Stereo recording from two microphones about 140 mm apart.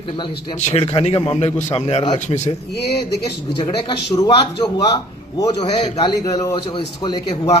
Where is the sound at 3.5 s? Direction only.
30° left (ahead or behind).